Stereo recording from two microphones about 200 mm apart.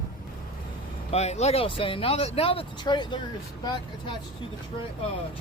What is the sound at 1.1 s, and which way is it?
Speech, 35° left (ahead or behind).